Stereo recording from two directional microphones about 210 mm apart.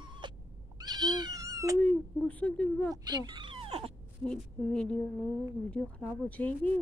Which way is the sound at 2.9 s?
20° right (ahead or behind).